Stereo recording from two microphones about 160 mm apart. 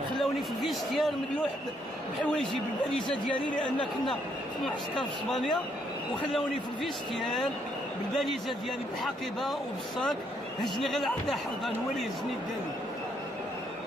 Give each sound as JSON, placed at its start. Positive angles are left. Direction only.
{"t": 0.2, "sound": "speech", "side_deg": 0}
{"t": 3.6, "sound": "speech", "side_deg": 30}
{"t": 4.6, "sound": "speech", "side_deg": 0}